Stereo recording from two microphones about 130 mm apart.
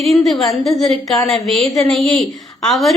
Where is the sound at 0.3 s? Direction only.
Centre (ahead or behind).